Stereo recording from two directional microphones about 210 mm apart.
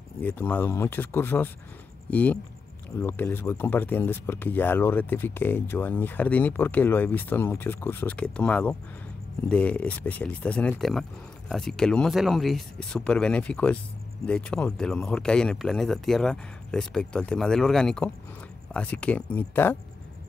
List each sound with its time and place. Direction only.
0.2 s speech: 10° left (ahead or behind)